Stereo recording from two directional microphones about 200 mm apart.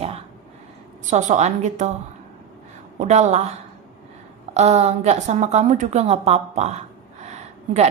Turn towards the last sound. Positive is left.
turn(degrees=-35)  # may be behind; listen again after turning